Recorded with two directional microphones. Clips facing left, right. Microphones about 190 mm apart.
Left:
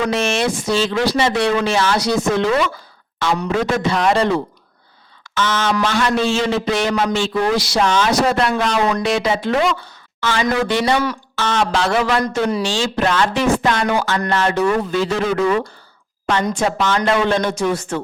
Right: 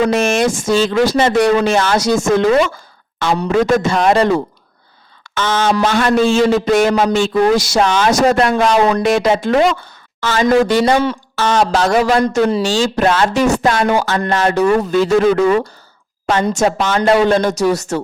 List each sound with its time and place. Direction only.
0.1 s speech: 45° right (ahead or behind)